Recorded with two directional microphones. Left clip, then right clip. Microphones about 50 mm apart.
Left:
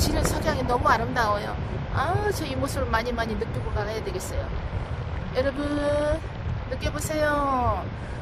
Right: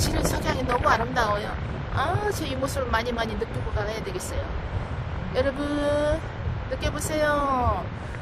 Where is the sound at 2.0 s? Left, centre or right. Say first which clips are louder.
Even; left.